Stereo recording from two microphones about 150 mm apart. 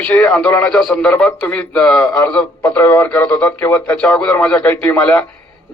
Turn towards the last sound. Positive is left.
turn(degrees=10)  # may be behind; listen again after turning